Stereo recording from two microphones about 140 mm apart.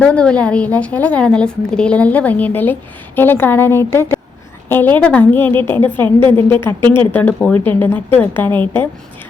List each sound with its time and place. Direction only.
0.0 s a woman's voice: 10° left (ahead or behind)